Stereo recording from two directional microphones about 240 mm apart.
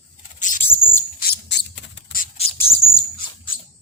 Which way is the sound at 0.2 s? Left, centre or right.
Left.